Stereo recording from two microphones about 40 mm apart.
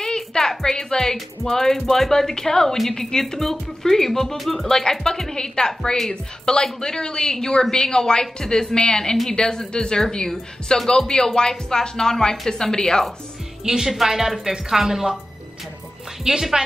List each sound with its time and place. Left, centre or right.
0.0 s music: centre
1.1 s speech: centre
13.7 s a woman's voice: centre
16.3 s a woman's voice: centre